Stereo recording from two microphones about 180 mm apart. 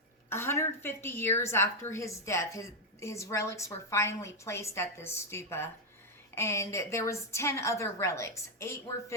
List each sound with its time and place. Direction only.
0.3 s a woman's voice: 15° left (ahead or behind)